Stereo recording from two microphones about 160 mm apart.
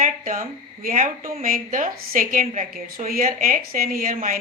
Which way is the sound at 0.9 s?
55° right (ahead or behind).